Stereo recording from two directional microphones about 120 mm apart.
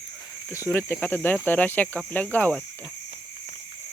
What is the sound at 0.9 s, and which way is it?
Speech, 15° left (ahead or behind).